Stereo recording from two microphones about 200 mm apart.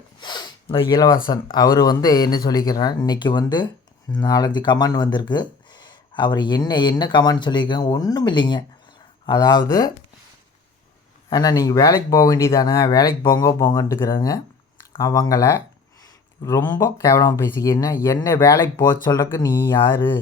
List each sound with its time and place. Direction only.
0.2 s speech: 20° left (ahead or behind)
11.3 s speech: 20° left (ahead or behind)